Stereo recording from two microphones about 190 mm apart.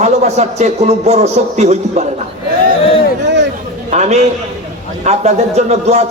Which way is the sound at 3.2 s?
70° right (ahead or behind).